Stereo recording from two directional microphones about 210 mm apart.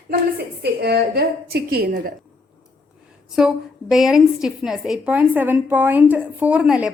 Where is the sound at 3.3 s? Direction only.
Centre (ahead or behind).